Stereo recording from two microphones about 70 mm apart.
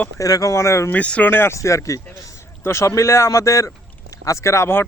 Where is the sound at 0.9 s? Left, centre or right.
Left.